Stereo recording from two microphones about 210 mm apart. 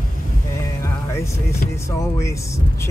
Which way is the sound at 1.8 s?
15° left (ahead or behind).